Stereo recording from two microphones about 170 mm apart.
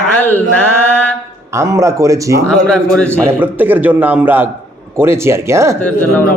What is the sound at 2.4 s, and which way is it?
Speech, 5° left (ahead or behind).